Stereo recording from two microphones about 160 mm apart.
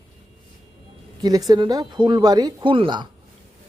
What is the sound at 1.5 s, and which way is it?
A man's voice, 25° right (ahead or behind).